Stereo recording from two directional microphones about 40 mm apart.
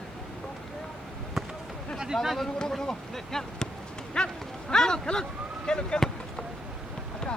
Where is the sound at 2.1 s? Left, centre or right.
Centre.